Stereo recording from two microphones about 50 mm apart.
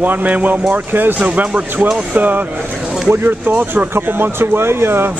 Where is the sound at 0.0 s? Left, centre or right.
Right.